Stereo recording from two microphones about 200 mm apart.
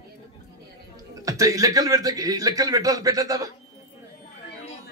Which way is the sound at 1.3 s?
15° right (ahead or behind).